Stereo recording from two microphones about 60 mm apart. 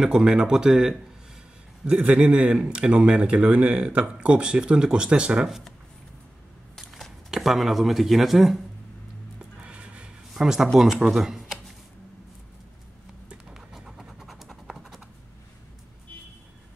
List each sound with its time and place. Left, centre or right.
0.0 s a man's voice: centre
1.9 s a man's voice: right
6.7 s a sound: centre
9.6 s a sound: centre
10.3 s a man's voice: centre
13.3 s scratch: centre